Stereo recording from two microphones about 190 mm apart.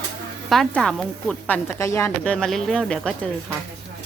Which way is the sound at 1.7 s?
15° left (ahead or behind).